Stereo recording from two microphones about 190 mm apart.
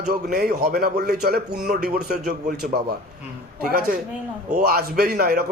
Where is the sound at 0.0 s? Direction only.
50° right (ahead or behind).